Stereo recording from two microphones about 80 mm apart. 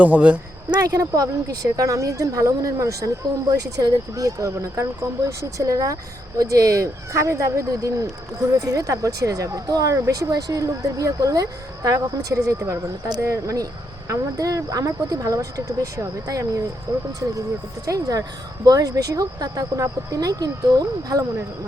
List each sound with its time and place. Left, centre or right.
0.0 s speech: centre
0.8 s speech: right
17.8 s speech: right